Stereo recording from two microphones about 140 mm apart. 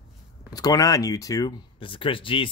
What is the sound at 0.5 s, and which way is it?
Speech, 25° left (ahead or behind).